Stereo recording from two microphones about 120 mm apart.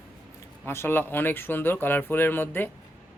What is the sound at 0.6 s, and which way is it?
Speech, 20° left (ahead or behind).